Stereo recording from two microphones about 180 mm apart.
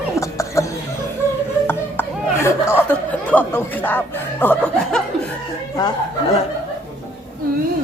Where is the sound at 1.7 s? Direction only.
15° left (ahead or behind).